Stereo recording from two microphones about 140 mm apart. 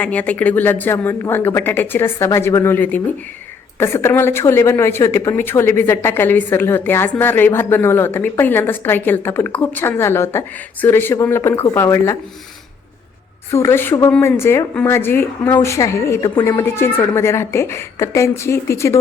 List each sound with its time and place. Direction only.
0.0 s a woman's voice: 10° left (ahead or behind)
13.5 s a woman's voice: 20° left (ahead or behind)